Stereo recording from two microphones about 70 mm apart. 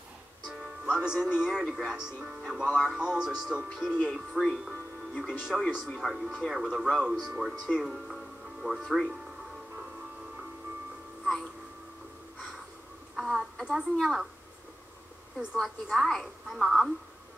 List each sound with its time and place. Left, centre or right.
0.5 s a woman's voice: centre
13.1 s a sound: centre
13.9 s a woman's voice: centre
15.3 s a woman's voice: centre